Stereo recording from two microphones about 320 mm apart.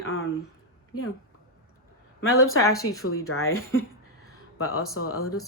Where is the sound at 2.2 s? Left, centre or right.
Left.